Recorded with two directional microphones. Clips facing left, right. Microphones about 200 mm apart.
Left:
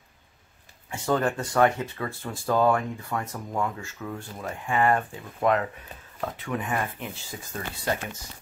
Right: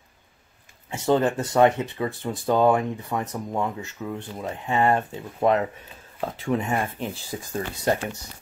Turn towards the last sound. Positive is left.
turn(degrees=-35)  # may be behind; listen again after turning